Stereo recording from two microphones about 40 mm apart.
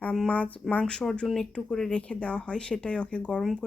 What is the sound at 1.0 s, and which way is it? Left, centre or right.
Speech, left.